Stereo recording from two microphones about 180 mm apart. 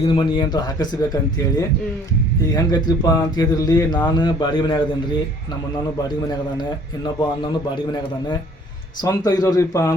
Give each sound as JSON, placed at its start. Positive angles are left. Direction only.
{"t": 0.0, "sound": "speech", "side_deg": 30}
{"t": 7.0, "sound": "speech", "side_deg": 20}
{"t": 9.0, "sound": "speech", "side_deg": 20}